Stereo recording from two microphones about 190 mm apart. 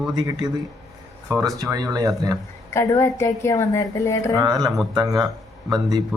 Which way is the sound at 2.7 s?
15° left (ahead or behind).